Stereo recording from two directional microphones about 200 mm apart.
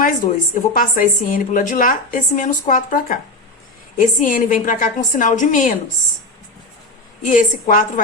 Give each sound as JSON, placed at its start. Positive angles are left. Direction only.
{"t": 0.5, "sound": "a woman's voice", "side_deg": 45}
{"t": 7.3, "sound": "a woman's voice", "side_deg": 40}